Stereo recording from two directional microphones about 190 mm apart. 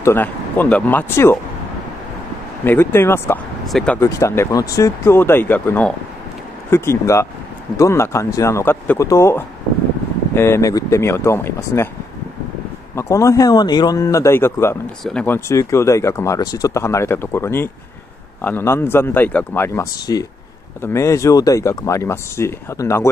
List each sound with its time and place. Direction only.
0.0 s speech: 10° left (ahead or behind)
2.6 s speech: 10° left (ahead or behind)
4.0 s speech: 15° left (ahead or behind)
12.9 s speech: 15° left (ahead or behind)